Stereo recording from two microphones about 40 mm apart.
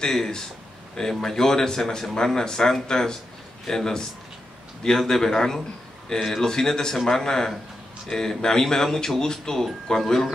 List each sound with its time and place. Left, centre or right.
0.0 s speech: centre